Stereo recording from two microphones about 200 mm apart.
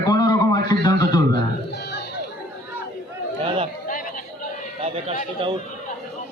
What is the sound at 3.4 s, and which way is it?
Chatter, 30° right (ahead or behind).